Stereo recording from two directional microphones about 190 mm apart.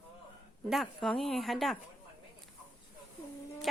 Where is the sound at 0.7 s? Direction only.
Centre (ahead or behind).